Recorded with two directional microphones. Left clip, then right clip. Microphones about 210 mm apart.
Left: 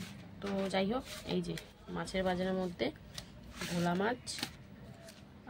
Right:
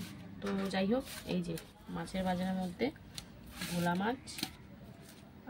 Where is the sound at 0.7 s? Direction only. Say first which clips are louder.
Right 2 dB; 55° left (ahead or behind).